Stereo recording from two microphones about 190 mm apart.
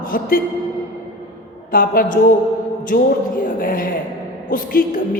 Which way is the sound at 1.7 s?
50° left (ahead or behind).